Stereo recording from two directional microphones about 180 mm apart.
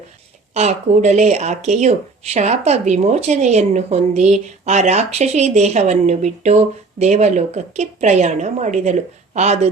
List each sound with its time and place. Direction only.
0.5 s a woman's voice: 40° right (ahead or behind)